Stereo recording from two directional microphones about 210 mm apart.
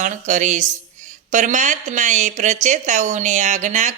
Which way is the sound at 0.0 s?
35° right (ahead or behind).